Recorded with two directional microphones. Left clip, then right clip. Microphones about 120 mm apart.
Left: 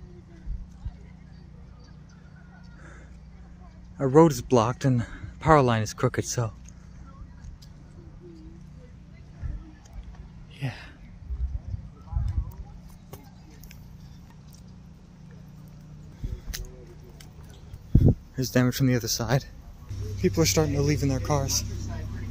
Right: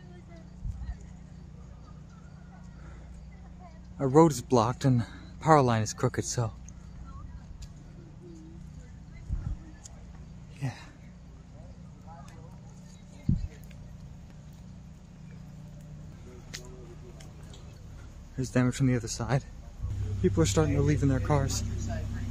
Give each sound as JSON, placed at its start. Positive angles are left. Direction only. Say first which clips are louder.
{"t": 4.0, "sound": "speech", "louder": "left 3 dB", "side_deg": 15}
{"t": 10.6, "sound": "a sound", "louder": "left 3 dB", "side_deg": 10}
{"t": 18.3, "sound": "speech", "louder": "right 1 dB", "side_deg": 25}
{"t": 20.2, "sound": "speech", "louder": "left 3 dB", "side_deg": 5}